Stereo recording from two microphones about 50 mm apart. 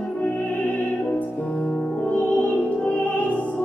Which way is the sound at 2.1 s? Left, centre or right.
Left.